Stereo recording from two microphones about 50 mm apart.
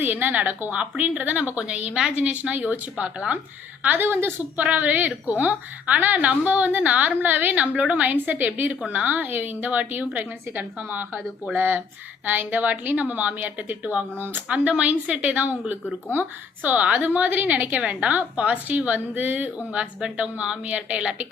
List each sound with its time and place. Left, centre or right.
0.0 s a woman's voice: right; by 2.1 s centre
2.1 s a woman's voice: right
3.8 s a woman's voice: right
4.5 s a woman's voice: right
8.1 s a woman's voice: right
16.6 s a woman's voice: right
19.7 s a woman's voice: right